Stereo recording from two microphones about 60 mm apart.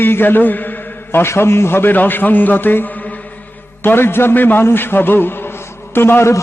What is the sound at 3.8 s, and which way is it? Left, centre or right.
A man's voice, left.